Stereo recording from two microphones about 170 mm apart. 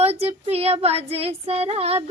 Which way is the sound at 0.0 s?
35° right (ahead or behind).